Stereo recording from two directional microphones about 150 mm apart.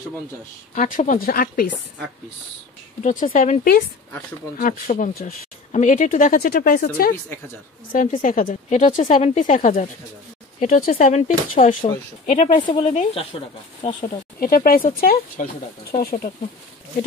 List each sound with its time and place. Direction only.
0.7 s speech: 60° left (ahead or behind); by 1.7 s 75° left (ahead or behind)
3.0 s speech: 55° left (ahead or behind)
4.6 s speech: 65° left (ahead or behind)
7.9 s speech: 65° left (ahead or behind)
12.8 s a woman's voice: 40° left (ahead or behind)
14.4 s speech: 70° left (ahead or behind)